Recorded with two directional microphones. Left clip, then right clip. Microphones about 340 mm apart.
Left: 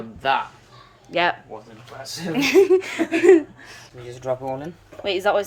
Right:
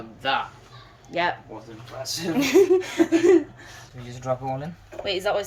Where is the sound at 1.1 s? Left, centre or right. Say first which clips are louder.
Left 4 dB; centre.